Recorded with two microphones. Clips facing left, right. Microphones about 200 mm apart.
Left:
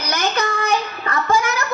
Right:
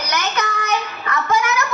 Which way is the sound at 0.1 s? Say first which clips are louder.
Left 3 dB; 30° left (ahead or behind).